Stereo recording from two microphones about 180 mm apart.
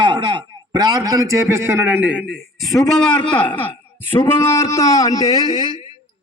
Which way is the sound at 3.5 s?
10° left (ahead or behind).